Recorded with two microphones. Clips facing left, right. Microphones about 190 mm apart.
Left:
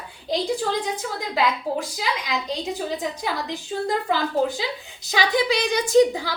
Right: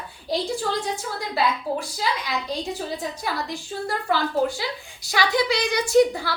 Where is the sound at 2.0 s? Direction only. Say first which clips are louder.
Even; 15° left (ahead or behind).